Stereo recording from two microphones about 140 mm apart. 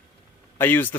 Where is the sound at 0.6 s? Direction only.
15° left (ahead or behind).